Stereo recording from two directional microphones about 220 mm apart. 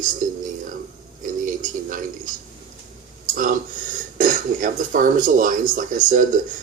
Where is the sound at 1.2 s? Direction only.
35° right (ahead or behind).